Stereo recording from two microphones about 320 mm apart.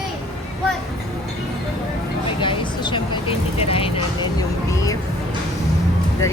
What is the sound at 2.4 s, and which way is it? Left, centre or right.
Vehicle, centre.